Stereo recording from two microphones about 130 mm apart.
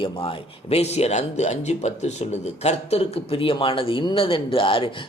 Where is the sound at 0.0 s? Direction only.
45° left (ahead or behind).